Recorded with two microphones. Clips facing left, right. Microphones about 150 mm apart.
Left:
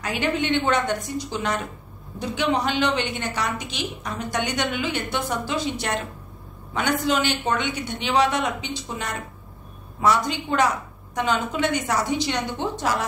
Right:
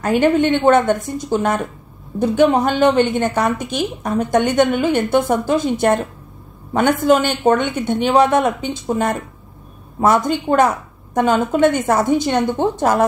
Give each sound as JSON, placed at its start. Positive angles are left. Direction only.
{"t": 0.0, "sound": "a woman's voice", "side_deg": -50}